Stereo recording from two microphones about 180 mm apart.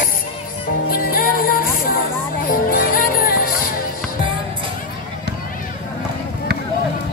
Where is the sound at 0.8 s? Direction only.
50° left (ahead or behind).